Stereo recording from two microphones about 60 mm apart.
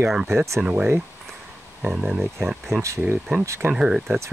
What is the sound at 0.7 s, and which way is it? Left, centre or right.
Speech, centre.